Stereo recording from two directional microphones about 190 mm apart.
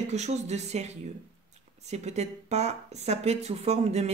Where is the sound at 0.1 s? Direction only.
35° right (ahead or behind).